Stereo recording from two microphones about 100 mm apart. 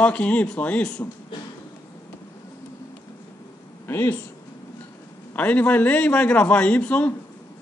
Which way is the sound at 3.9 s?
25° left (ahead or behind).